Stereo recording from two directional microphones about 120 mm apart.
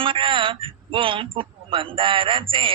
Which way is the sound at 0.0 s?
45° right (ahead or behind).